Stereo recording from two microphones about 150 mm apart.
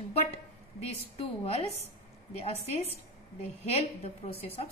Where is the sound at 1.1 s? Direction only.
45° left (ahead or behind).